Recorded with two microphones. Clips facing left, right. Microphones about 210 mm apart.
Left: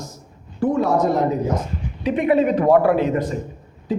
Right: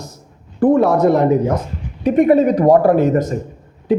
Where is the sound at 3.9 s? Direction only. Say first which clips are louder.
Right 7 dB; 60° right (ahead or behind).